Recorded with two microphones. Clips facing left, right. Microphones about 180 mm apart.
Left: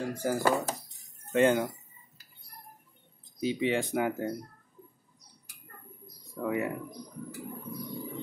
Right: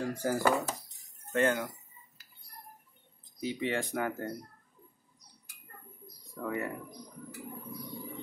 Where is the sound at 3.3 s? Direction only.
20° left (ahead or behind).